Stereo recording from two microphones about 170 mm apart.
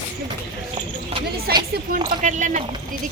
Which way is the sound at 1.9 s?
45° right (ahead or behind).